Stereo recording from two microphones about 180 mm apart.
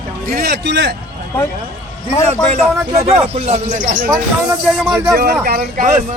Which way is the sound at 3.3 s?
40° right (ahead or behind).